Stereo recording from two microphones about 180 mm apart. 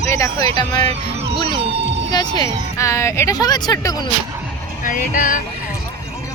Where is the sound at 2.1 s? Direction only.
25° left (ahead or behind).